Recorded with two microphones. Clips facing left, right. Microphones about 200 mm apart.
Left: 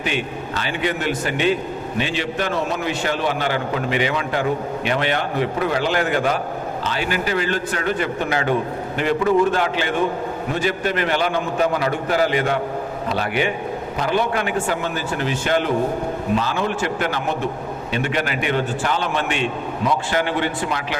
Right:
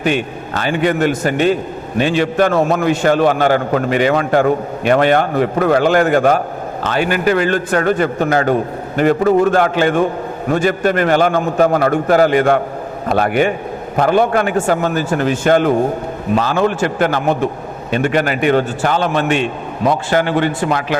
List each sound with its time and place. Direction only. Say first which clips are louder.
0.0 s a man's voice: right 7 dB; 50° right (ahead or behind)